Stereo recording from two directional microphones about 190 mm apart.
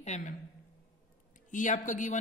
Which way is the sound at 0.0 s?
40° left (ahead or behind).